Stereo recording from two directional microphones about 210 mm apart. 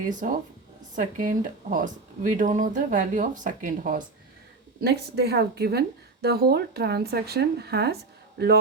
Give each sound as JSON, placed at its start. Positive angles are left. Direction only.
{"t": 0.1, "sound": "speech", "side_deg": -40}
{"t": 4.8, "sound": "speech", "side_deg": -50}